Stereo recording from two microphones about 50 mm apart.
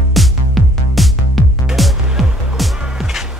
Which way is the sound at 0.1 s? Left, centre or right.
Centre.